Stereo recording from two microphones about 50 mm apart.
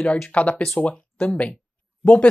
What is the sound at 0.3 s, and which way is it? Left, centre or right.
Speech, left.